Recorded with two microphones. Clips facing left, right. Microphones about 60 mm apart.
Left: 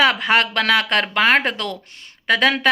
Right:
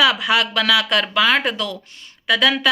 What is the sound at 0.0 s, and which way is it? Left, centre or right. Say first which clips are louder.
Speech: left 1 dB; left.